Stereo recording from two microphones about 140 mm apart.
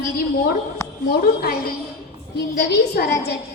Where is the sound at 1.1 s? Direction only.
90° left.